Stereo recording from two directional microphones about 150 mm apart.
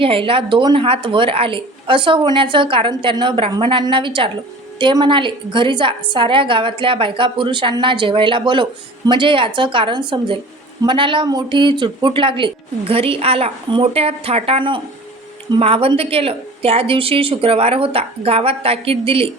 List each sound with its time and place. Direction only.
0.0 s a woman's voice: 35° right (ahead or behind)